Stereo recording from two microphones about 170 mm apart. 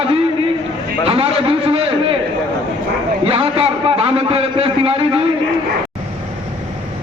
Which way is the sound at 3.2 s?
35° right (ahead or behind).